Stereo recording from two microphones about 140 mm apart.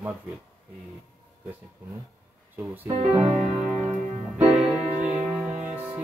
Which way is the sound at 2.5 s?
15° right (ahead or behind).